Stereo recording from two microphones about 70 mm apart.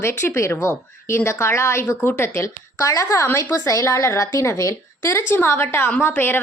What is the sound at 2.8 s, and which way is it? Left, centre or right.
A woman's voice, left.